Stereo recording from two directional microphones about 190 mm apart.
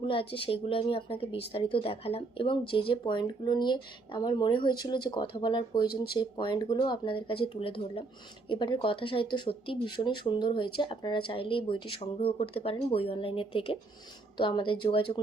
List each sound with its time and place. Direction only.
0.0 s speech: 30° left (ahead or behind)